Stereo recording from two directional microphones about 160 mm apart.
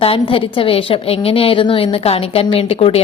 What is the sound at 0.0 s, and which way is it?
A woman's voice, 35° left (ahead or behind).